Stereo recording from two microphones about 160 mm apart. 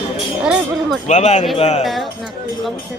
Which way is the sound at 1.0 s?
45° left (ahead or behind).